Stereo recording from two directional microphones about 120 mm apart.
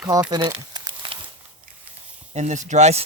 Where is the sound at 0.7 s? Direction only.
40° right (ahead or behind).